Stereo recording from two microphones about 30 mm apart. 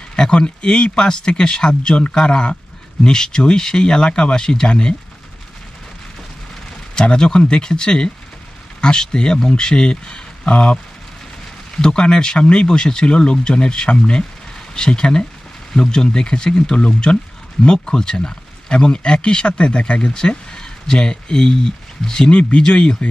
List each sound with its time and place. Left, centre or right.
0.1 s speech: left
7.0 s speech: left
10.5 s speech: left
11.7 s speech: left
12.4 s speech: left
12.6 s speech: left
16.7 s speech: left